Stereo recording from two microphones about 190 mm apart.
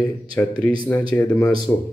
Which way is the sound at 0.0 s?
20° left (ahead or behind).